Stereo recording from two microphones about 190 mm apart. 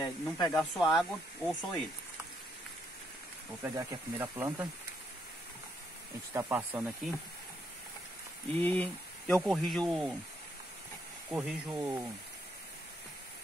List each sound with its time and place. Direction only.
0.0 s speech: 15° left (ahead or behind)
0.6 s speech: centre (ahead or behind)
3.6 s speech: 15° right (ahead or behind)
6.3 s speech: 10° right (ahead or behind)
8.5 s speech: 10° left (ahead or behind)
11.3 s speech: 10° right (ahead or behind)